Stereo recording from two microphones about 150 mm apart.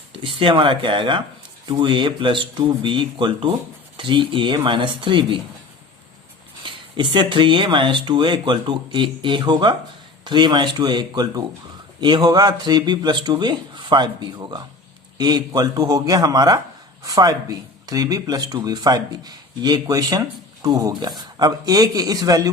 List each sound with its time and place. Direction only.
0.2 s speech: 35° right (ahead or behind)
6.6 s speech: 30° right (ahead or behind)